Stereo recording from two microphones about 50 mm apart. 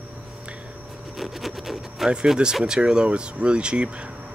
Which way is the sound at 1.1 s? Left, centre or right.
Centre.